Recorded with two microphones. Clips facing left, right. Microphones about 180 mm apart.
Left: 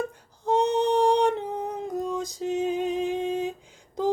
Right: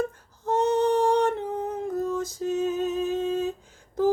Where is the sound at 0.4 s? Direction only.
15° left (ahead or behind).